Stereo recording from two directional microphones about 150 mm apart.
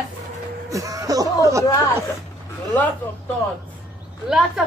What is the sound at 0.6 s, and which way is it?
Speech, 20° right (ahead or behind).